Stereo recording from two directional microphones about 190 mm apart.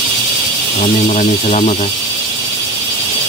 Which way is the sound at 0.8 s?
40° left (ahead or behind).